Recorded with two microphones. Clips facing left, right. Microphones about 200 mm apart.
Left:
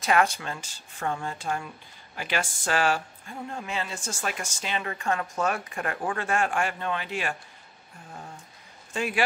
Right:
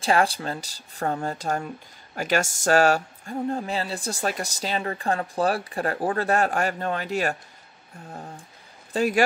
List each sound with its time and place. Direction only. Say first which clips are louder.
0.0 s speech: right 2 dB; 30° right (ahead or behind)